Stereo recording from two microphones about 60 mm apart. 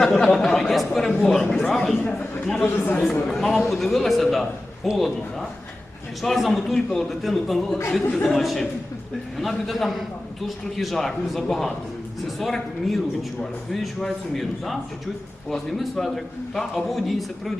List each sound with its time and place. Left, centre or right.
0.0 s a man's voice: centre
2.7 s speech: left
3.2 s a man's voice: centre